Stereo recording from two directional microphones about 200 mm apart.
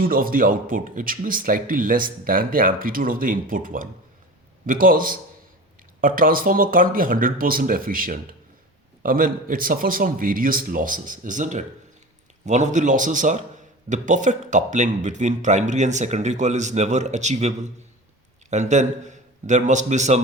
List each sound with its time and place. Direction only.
0.0 s a man's voice: 45° right (ahead or behind)